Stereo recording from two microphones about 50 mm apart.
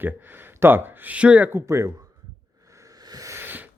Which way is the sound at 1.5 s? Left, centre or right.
Right.